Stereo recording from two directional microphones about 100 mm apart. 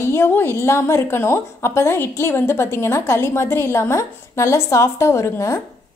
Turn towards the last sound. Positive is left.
turn(degrees=30)  # may be behind; listen again after turning